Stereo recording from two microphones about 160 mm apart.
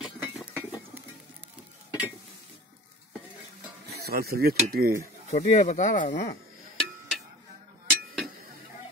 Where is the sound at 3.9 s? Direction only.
80° right.